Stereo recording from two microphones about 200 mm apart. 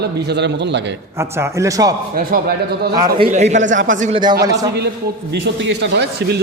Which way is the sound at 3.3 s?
35° right (ahead or behind).